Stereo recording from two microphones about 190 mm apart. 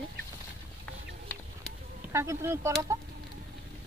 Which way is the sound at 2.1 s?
15° right (ahead or behind).